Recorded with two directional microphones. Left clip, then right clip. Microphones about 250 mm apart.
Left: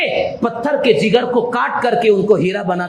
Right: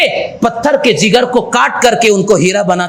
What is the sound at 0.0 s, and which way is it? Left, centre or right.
A man's voice, right.